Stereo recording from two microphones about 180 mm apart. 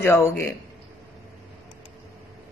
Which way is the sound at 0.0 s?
10° left (ahead or behind).